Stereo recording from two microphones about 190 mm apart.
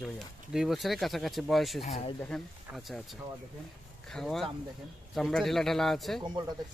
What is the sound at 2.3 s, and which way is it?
Speech, centre (ahead or behind).